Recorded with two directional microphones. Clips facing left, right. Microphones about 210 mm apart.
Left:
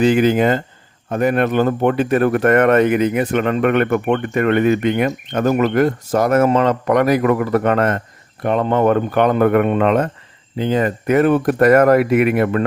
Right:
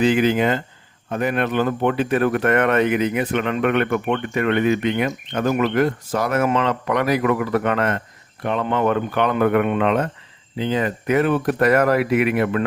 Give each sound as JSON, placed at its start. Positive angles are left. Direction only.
{"t": 0.0, "sound": "speech", "side_deg": 45}